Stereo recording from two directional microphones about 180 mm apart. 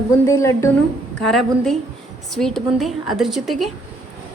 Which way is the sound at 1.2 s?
Centre (ahead or behind).